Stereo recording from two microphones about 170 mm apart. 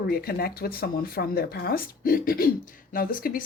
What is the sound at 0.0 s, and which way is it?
Speech, 65° left (ahead or behind).